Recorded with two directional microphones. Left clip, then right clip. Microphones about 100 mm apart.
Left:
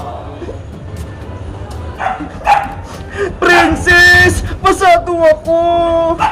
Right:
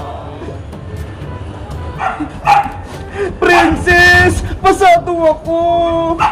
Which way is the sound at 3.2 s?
30° left (ahead or behind).